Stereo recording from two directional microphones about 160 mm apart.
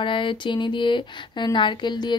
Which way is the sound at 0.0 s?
30° left (ahead or behind).